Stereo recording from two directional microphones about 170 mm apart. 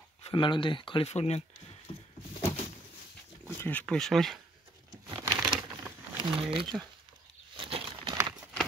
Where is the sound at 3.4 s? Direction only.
10° left (ahead or behind).